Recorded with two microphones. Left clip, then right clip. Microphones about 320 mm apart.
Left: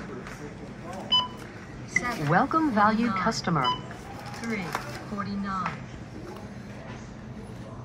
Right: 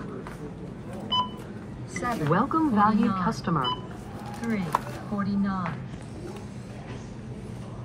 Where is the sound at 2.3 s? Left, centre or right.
Left.